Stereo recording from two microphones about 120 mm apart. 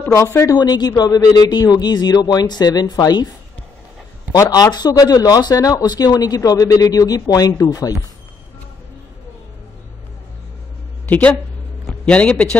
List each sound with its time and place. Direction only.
0.0 s speech: 25° left (ahead or behind)
4.3 s speech: 30° left (ahead or behind)
11.1 s a man's voice: 10° left (ahead or behind)